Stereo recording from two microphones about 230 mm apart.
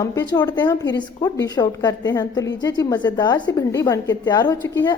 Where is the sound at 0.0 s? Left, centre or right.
Centre.